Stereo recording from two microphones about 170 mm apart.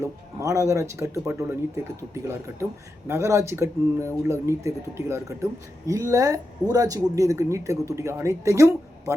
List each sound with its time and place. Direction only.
0.0 s speech: 15° right (ahead or behind)